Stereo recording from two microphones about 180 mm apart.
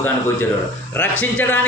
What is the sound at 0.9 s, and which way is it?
Speech, 10° left (ahead or behind).